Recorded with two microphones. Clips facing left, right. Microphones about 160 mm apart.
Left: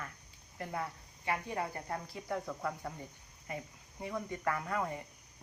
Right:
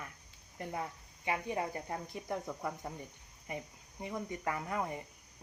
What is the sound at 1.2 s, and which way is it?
Speech, 20° right (ahead or behind).